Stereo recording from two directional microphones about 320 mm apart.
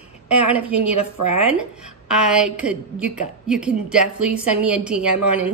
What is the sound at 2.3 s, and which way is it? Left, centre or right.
A woman's voice, centre.